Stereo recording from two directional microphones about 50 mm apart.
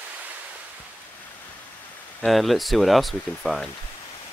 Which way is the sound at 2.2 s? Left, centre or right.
Centre.